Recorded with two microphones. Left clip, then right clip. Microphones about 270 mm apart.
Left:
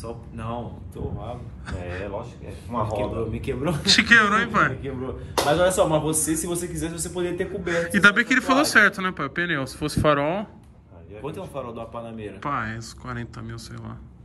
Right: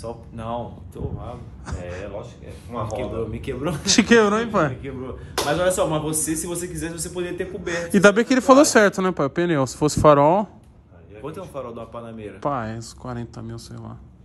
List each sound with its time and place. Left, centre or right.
2.8 s a man's voice: centre
3.8 s speech: right
4.8 s a man's voice: centre
7.7 s speech: right
11.2 s a man's voice: centre
12.4 s speech: centre